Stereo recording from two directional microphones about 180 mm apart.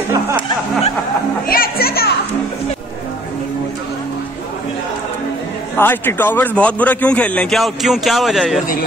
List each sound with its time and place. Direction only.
1.5 s music: 55° left (ahead or behind)
5.8 s a man's voice: 10° left (ahead or behind)